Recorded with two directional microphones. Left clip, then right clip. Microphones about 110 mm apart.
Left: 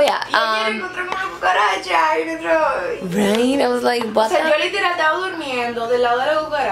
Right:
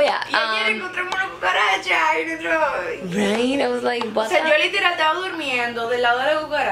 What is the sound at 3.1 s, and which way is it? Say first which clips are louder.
Speech: left 3 dB; 10° left (ahead or behind).